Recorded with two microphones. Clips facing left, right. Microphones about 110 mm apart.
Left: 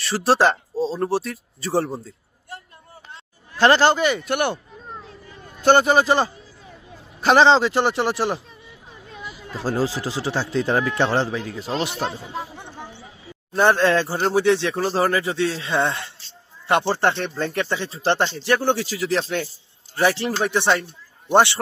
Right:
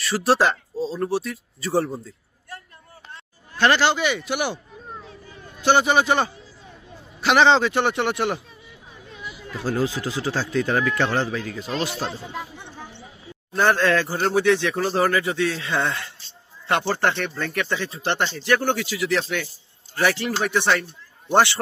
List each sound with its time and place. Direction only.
0.0 s speech: 30° left (ahead or behind)
3.6 s speech: 40° left (ahead or behind)
4.0 s speech: centre (ahead or behind)
4.9 s a sound: centre (ahead or behind)
5.7 s speech: centre (ahead or behind)
7.2 s speech: 35° left (ahead or behind)
9.5 s speech: 35° left (ahead or behind)
13.5 s speech: 25° left (ahead or behind)
20.0 s speech: 25° left (ahead or behind)